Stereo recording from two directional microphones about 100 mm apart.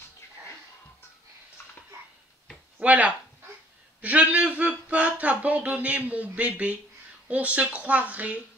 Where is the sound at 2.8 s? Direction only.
15° right (ahead or behind).